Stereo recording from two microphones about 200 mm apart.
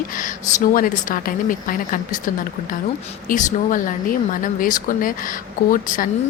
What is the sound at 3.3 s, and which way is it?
Speech, 40° left (ahead or behind).